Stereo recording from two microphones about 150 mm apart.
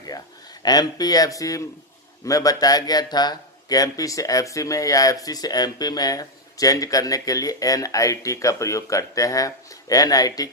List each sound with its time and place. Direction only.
0.6 s speech: 25° left (ahead or behind)